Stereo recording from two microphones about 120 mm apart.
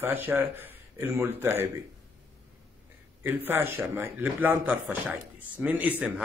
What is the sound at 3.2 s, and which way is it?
A man's voice, 20° right (ahead or behind).